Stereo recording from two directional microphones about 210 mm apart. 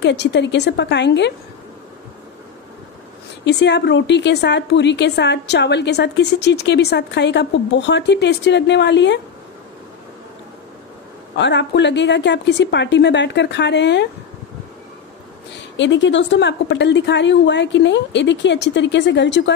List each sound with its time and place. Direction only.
0.0 s a woman's voice: 55° left (ahead or behind)
3.4 s a woman's voice: 55° left (ahead or behind)
11.3 s a woman's voice: 55° left (ahead or behind)
15.8 s a woman's voice: 60° left (ahead or behind)